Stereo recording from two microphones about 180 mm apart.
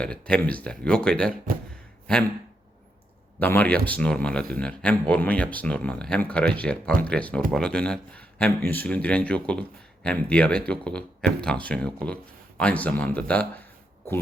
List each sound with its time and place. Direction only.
0.0 s speech: 5° left (ahead or behind)
3.4 s a man's voice: 10° left (ahead or behind)